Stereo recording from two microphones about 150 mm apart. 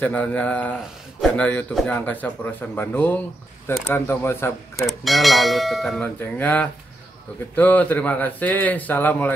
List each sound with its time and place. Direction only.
0.0 s speech: 10° left (ahead or behind)
4.7 s speech: centre (ahead or behind)
6.0 s speech: 10° left (ahead or behind)